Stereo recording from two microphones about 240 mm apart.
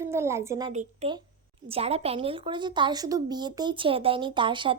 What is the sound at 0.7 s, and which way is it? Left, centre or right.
A woman's voice, right.